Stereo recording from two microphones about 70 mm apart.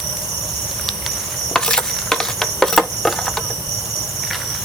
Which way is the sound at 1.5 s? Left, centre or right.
Centre.